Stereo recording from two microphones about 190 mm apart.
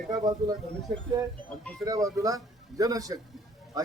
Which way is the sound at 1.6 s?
5° left (ahead or behind).